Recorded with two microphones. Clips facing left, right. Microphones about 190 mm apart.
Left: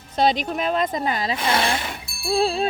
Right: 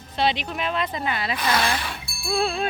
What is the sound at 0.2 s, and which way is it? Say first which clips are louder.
Speech: left 4 dB; 40° left (ahead or behind).